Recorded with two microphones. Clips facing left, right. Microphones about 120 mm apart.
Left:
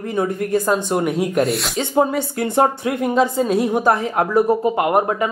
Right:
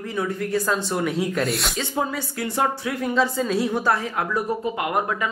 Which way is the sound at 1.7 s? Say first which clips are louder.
Left 8 dB; 30° left (ahead or behind).